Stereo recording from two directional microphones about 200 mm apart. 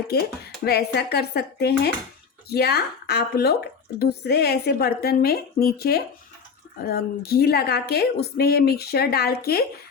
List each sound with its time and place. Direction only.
0.1 s speech: 50° left (ahead or behind)